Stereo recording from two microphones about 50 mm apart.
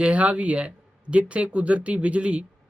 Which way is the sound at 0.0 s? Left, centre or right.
Right.